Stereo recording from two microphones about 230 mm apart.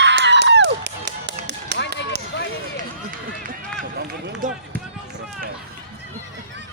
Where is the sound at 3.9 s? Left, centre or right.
Right.